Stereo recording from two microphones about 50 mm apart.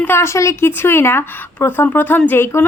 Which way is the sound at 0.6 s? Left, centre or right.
Left.